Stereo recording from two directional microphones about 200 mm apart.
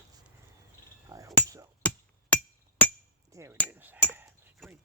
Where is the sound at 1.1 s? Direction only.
15° right (ahead or behind).